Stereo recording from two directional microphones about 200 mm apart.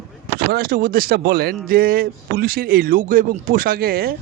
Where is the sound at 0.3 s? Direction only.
50° right (ahead or behind).